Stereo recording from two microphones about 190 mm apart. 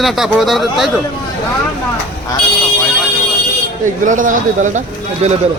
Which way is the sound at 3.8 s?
40° right (ahead or behind).